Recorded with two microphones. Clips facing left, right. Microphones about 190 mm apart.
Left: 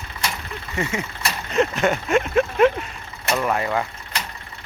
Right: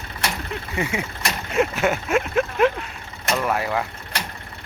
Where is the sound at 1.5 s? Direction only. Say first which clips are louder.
Left 1 dB; 5° right (ahead or behind).